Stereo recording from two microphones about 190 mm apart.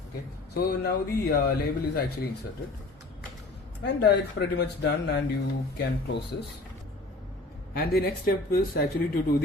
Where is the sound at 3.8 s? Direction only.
60° left (ahead or behind).